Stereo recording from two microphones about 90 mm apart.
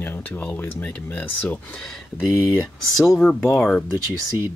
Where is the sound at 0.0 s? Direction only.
25° left (ahead or behind).